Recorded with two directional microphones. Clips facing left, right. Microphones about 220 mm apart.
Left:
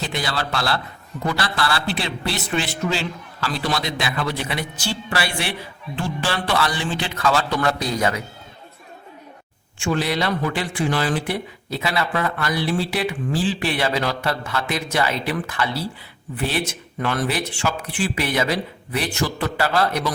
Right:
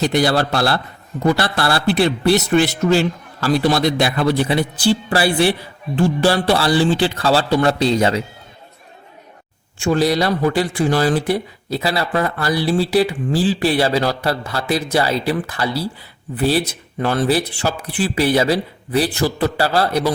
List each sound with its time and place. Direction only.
1.4 s speech: 45° right (ahead or behind); by 8.2 s 30° right (ahead or behind)
9.7 s speech: 40° right (ahead or behind)